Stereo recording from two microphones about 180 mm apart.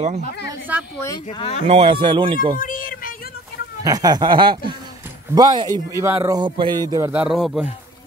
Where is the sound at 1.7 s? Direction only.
30° right (ahead or behind).